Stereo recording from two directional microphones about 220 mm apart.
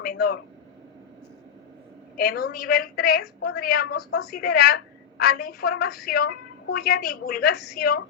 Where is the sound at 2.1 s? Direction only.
45° left (ahead or behind).